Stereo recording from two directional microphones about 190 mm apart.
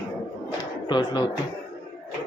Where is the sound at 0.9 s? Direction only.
20° left (ahead or behind).